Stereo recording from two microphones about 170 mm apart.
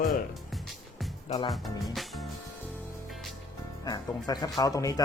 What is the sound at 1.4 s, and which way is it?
Speech, centre (ahead or behind).